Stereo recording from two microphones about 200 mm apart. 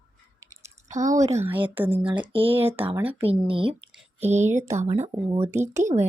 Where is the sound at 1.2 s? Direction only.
15° right (ahead or behind).